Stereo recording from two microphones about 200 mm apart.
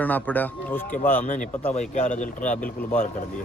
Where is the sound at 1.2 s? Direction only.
40° left (ahead or behind).